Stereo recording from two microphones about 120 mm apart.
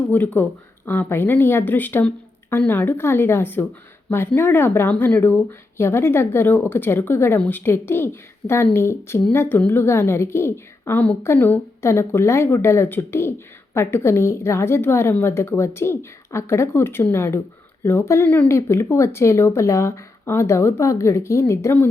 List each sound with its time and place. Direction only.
0.1 s a woman's voice: 15° left (ahead or behind)